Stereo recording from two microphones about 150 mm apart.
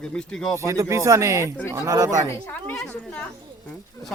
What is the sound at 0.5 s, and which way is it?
Speech, 20° right (ahead or behind).